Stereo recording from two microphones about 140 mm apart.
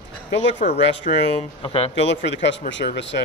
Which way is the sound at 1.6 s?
45° left (ahead or behind).